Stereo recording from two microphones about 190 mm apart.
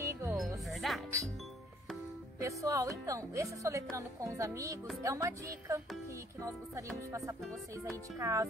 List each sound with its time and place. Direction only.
0.0 s music: 15° right (ahead or behind)
0.7 s music: centre (ahead or behind)
2.4 s speech: 15° right (ahead or behind)